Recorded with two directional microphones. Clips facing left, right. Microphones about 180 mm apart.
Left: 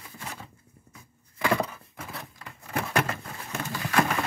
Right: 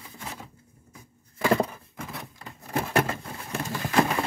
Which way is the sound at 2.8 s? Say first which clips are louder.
Right 3 dB; 35° right (ahead or behind).